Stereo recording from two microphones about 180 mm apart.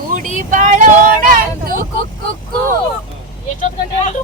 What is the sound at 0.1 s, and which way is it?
Vehicle, 45° right (ahead or behind).